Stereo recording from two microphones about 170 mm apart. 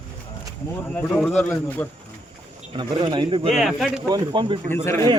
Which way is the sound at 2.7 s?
25° right (ahead or behind).